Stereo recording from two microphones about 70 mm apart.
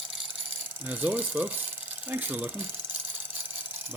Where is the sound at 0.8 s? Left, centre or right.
Right.